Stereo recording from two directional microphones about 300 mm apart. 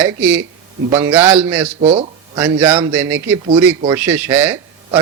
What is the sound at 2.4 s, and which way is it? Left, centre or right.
Speech, centre.